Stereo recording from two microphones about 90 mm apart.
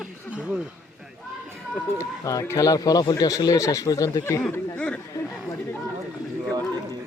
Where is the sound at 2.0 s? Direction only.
35° left (ahead or behind).